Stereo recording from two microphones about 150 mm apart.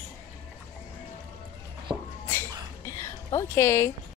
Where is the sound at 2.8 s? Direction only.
20° left (ahead or behind).